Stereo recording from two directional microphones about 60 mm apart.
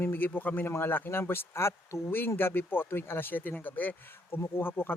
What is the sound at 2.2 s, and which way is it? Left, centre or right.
Speech, left.